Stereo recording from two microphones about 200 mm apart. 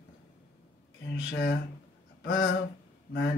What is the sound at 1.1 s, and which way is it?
Speech, 60° left (ahead or behind).